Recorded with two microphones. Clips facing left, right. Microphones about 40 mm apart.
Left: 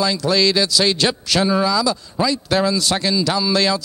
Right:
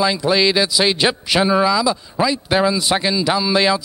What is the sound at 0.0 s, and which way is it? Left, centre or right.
A man's voice, right.